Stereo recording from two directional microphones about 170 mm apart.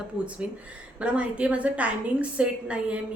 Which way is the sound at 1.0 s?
5° right (ahead or behind).